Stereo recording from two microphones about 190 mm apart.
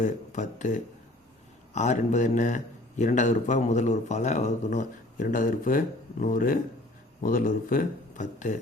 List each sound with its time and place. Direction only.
0.0 s a man's voice: 40° left (ahead or behind)